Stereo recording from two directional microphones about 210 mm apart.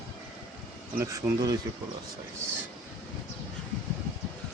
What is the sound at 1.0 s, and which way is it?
Speech, 15° right (ahead or behind).